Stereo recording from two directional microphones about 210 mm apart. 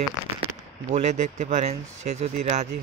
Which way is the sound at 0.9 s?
35° right (ahead or behind).